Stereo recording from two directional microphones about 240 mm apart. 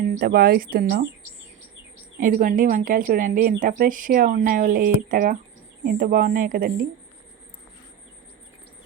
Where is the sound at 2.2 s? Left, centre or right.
Right.